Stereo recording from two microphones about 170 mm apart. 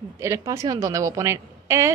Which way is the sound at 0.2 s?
20° right (ahead or behind).